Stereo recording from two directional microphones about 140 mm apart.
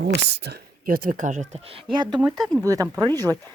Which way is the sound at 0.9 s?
90° right.